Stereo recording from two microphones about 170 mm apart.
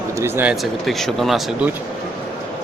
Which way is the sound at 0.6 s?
Centre (ahead or behind).